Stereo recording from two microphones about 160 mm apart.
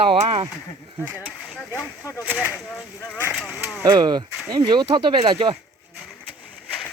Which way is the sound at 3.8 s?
25° right (ahead or behind).